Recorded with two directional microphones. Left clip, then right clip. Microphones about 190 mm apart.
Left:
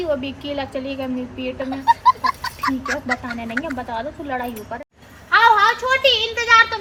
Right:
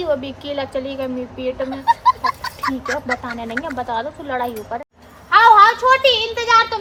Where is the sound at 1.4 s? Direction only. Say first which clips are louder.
Right 2 dB; centre (ahead or behind).